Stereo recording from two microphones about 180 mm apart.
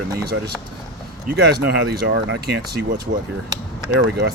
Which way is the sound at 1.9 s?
60° right (ahead or behind).